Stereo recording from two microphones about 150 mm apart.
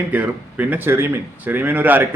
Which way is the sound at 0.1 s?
10° right (ahead or behind).